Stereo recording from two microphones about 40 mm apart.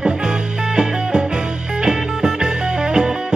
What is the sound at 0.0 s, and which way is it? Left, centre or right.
Music, centre.